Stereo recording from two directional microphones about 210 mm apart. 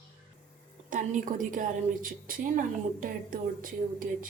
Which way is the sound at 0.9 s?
40° right (ahead or behind).